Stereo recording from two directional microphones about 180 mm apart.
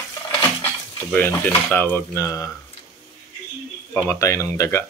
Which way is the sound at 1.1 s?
10° left (ahead or behind).